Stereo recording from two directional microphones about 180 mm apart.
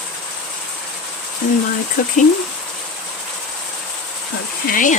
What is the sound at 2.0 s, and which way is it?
Speech, 50° left (ahead or behind).